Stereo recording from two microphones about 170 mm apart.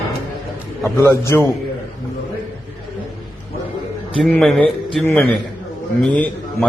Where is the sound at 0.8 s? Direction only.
15° left (ahead or behind).